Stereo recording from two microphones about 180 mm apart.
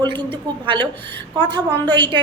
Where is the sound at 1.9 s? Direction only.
25° right (ahead or behind).